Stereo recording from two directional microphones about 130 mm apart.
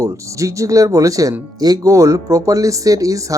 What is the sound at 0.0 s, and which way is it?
Speech, 25° right (ahead or behind).